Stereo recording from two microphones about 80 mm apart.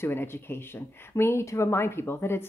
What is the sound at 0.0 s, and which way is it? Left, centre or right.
Speech, left.